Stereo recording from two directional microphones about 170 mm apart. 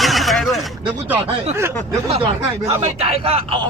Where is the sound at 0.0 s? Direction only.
Centre (ahead or behind).